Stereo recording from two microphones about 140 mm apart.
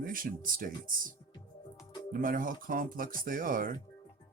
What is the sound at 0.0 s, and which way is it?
Speech, 80° right.